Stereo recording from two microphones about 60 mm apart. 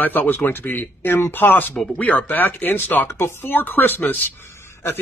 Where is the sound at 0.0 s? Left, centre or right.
Left.